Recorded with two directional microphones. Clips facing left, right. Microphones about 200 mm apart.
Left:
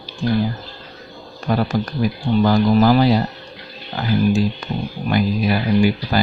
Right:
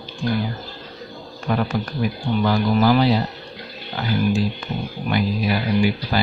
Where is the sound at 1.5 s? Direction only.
35° left (ahead or behind).